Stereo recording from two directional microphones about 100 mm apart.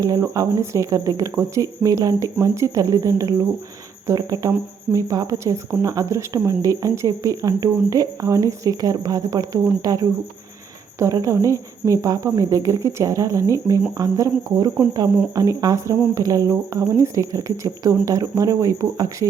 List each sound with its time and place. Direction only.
0.0 s speech: 35° right (ahead or behind)